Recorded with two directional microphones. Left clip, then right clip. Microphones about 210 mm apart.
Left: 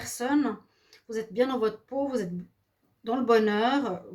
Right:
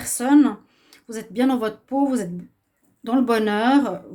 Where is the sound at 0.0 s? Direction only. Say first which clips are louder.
Right 10 dB; 45° right (ahead or behind).